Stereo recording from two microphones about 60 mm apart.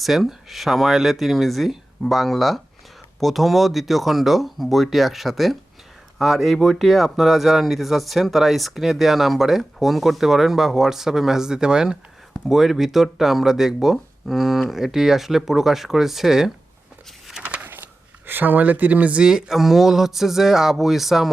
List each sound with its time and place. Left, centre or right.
0.0 s speech: centre
17.4 s a sound: right
18.3 s speech: right
19.2 s speech: centre